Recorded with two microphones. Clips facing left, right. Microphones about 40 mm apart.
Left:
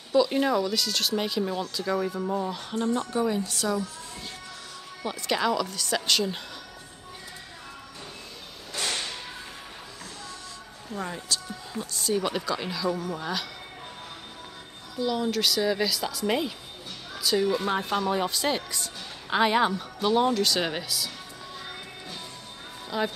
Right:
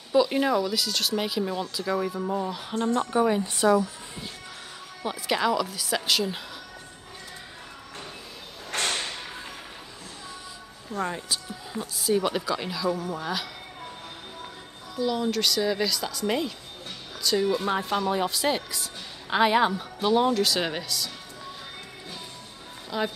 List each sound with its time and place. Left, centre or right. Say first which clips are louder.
0.1 s speech: right 1 dB; centre
2.8 s a woman's voice: right 3 dB; centre
5.0 s speech: right 1 dB; centre
8.7 s whip: right 3 dB; right
11.1 s speech: right 1 dB; centre
15.0 s speech: right 1 dB; centre
22.8 s speech: even; centre